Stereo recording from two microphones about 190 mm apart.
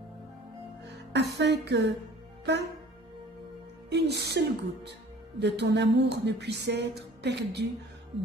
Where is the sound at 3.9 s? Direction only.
60° right (ahead or behind).